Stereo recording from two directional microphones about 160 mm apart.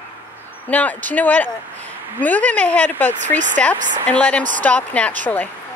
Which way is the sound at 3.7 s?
50° right (ahead or behind).